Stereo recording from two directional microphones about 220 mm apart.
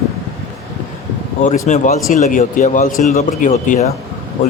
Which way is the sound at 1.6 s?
35° left (ahead or behind).